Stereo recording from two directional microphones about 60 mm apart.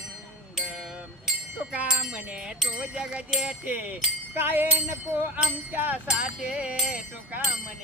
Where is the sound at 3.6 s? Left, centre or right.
Right.